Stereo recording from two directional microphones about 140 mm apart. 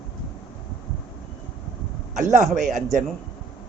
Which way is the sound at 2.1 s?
60° right (ahead or behind).